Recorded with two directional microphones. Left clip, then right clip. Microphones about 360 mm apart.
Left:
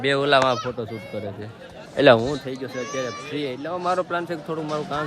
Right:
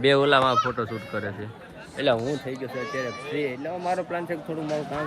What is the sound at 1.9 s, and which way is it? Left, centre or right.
Speech, left.